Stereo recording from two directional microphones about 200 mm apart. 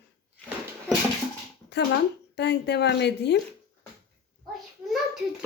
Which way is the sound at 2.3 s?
60° left (ahead or behind).